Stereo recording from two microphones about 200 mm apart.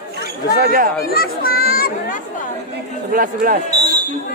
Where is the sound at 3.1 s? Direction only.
45° right (ahead or behind).